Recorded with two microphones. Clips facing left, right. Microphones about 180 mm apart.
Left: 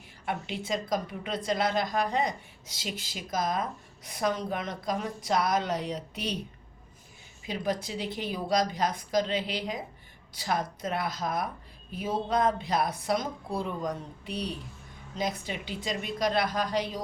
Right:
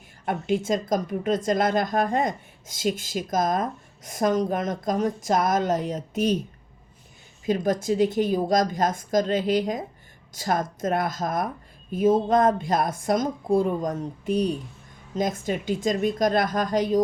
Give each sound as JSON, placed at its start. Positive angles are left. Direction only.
{"t": 0.4, "sound": "a woman's voice", "side_deg": -45}
{"t": 7.4, "sound": "a woman's voice", "side_deg": -45}